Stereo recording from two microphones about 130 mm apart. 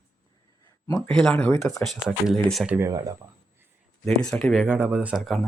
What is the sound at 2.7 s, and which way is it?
Speech, 20° right (ahead or behind).